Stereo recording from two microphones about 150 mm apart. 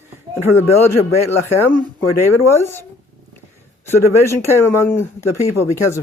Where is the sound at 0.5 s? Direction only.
15° left (ahead or behind).